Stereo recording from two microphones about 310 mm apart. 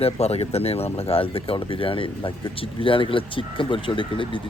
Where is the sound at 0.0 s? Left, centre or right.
Centre.